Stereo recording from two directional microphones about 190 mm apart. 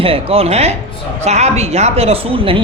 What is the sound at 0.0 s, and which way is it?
Speech, 30° right (ahead or behind).